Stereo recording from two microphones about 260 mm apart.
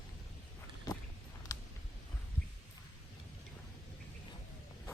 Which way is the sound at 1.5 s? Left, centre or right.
Centre.